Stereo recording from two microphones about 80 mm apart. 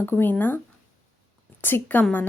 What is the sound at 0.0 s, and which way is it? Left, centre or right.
Speech, left.